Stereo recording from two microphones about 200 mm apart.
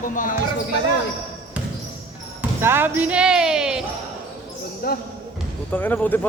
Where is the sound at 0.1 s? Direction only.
40° left (ahead or behind).